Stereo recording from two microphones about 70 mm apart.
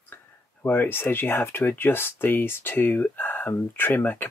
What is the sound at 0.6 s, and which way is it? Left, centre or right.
Speech, left.